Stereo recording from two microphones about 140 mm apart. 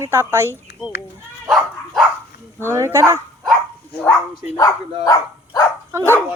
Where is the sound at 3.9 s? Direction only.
15° left (ahead or behind).